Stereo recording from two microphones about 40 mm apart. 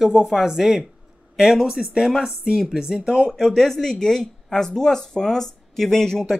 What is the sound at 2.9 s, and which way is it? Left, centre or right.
Speech, centre.